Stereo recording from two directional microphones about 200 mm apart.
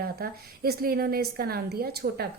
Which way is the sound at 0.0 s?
50° right (ahead or behind).